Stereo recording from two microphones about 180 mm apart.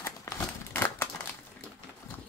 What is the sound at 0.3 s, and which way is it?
Crumpling, 15° left (ahead or behind).